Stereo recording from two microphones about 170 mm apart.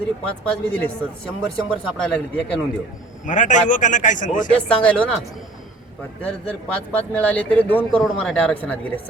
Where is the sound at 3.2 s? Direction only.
50° left (ahead or behind).